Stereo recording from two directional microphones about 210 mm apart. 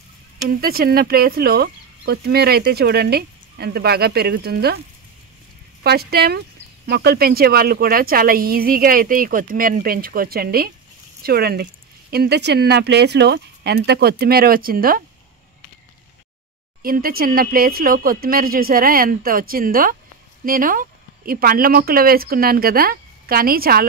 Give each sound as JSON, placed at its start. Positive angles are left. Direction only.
{"t": 0.6, "sound": "speech", "side_deg": -45}
{"t": 5.9, "sound": "speech", "side_deg": -50}
{"t": 16.8, "sound": "speech", "side_deg": -45}